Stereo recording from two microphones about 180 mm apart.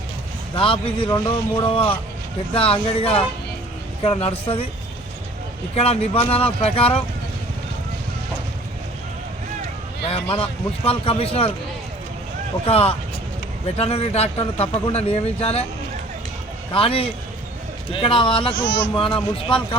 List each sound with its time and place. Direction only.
0.5 s speech: 30° left (ahead or behind)
5.7 s speech: 35° left (ahead or behind)
10.1 s speech: 30° left (ahead or behind)
12.6 s speech: 35° left (ahead or behind)
16.7 s speech: 30° left (ahead or behind)